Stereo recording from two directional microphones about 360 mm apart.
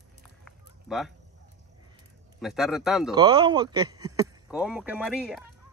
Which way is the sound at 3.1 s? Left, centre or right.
Centre.